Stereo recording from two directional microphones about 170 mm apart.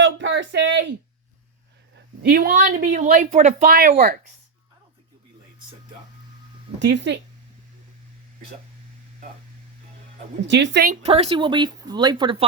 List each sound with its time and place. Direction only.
0.0 s a sound: 90° right
2.0 s a sound: 65° right (ahead or behind)
2.6 s speech: 50° right (ahead or behind)
6.7 s speech: 90° right
10.4 s speech: 90° right
11.0 s speech: 35° right (ahead or behind)